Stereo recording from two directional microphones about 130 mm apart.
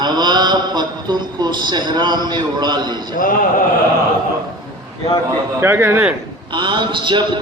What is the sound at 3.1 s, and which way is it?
Speech, 90° left.